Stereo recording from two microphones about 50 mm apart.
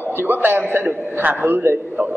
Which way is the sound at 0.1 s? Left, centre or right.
Right.